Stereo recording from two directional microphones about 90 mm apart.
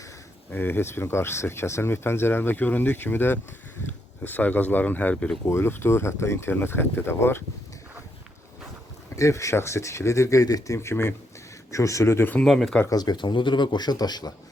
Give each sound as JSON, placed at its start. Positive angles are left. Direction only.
{"t": 0.5, "sound": "speech", "side_deg": 25}
{"t": 5.5, "sound": "speech", "side_deg": 25}
{"t": 9.1, "sound": "speech", "side_deg": 35}
{"t": 10.8, "sound": "speech", "side_deg": 30}
{"t": 12.4, "sound": "speech", "side_deg": 5}
{"t": 12.9, "sound": "a man's voice", "side_deg": 50}